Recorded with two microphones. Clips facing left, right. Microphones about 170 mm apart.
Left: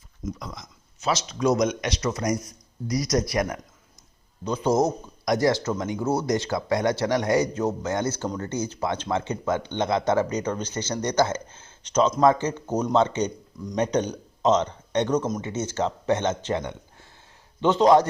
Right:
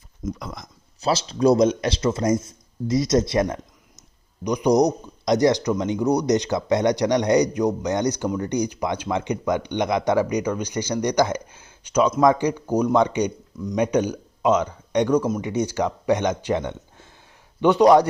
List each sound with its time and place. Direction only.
0.3 s speech: 55° right (ahead or behind)
1.0 s speech: 30° right (ahead or behind)
4.4 s a man's voice: 15° right (ahead or behind)